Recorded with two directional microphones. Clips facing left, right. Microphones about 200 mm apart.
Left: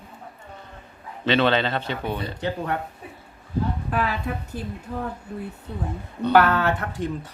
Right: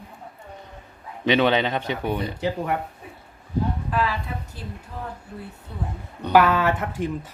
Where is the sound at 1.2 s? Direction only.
15° right (ahead or behind).